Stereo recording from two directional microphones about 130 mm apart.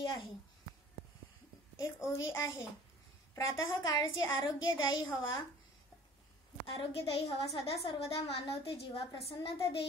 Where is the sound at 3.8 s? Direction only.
35° left (ahead or behind).